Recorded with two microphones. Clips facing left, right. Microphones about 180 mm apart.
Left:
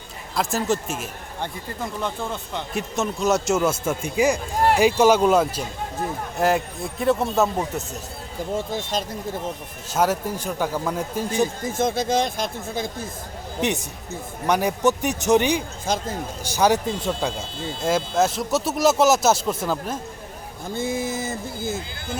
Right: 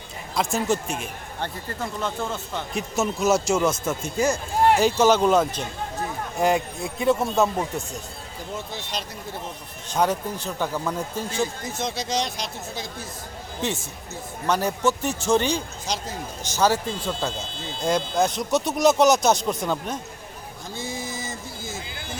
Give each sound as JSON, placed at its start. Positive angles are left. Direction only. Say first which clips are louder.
{"t": 0.3, "sound": "speech", "louder": "even", "side_deg": 0}
{"t": 1.4, "sound": "a man's voice", "louder": "even", "side_deg": 15}
{"t": 2.7, "sound": "a man's voice", "louder": "even", "side_deg": -5}
{"t": 8.5, "sound": "speech", "louder": "left 7 dB", "side_deg": 50}
{"t": 9.9, "sound": "a man's voice", "louder": "left 1 dB", "side_deg": 5}
{"t": 11.7, "sound": "speech", "louder": "left 6 dB", "side_deg": 50}
{"t": 13.6, "sound": "a man's voice", "louder": "left 4 dB", "side_deg": 20}
{"t": 15.9, "sound": "speech", "louder": "left 5 dB", "side_deg": 50}
{"t": 16.4, "sound": "a man's voice", "louder": "left 2 dB", "side_deg": 10}
{"t": 20.7, "sound": "speech", "louder": "left 7 dB", "side_deg": 55}